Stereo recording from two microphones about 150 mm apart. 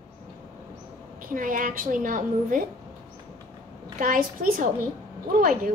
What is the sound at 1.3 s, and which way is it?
A woman's voice, 65° right (ahead or behind).